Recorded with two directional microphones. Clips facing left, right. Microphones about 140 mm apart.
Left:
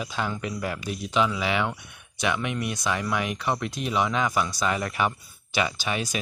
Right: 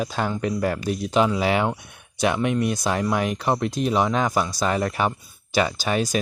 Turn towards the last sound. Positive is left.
turn(degrees=-40)  # may be behind; listen again after turning